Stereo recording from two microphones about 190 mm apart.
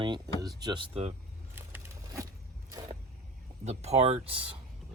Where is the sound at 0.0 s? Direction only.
20° right (ahead or behind).